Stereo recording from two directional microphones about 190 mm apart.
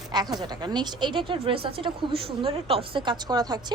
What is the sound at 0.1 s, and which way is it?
A woman's voice, 20° right (ahead or behind).